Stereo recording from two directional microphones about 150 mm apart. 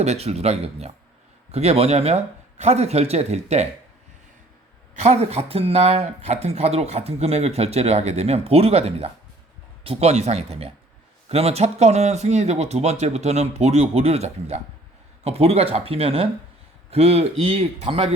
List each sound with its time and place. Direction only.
0.0 s speech: 45° right (ahead or behind)
4.9 s speech: 45° right (ahead or behind)